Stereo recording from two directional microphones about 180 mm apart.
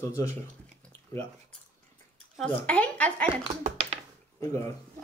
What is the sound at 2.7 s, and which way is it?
Speech, 5° left (ahead or behind).